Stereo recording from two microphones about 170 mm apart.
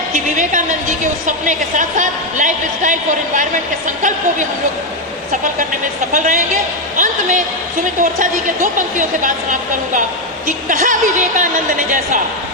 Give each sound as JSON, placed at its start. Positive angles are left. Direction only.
{"t": 0.1, "sound": "a woman's voice", "side_deg": -45}
{"t": 6.1, "sound": "a woman's voice", "side_deg": -45}
{"t": 9.0, "sound": "a woman's voice", "side_deg": -50}